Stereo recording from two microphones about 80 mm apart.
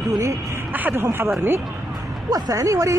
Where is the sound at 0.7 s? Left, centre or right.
Right.